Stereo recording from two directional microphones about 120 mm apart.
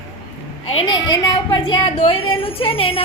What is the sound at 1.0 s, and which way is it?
Speech, 35° left (ahead or behind).